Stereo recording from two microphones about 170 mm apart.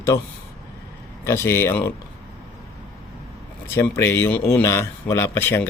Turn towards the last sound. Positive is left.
turn(degrees=15)  # may be behind; listen again after turning